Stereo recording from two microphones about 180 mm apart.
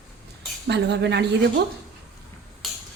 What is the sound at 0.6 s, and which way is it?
Speech, 70° right (ahead or behind).